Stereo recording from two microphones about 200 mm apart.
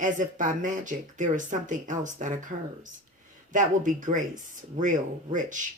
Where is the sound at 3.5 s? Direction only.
40° right (ahead or behind).